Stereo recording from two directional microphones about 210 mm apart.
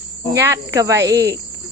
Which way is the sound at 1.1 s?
50° right (ahead or behind).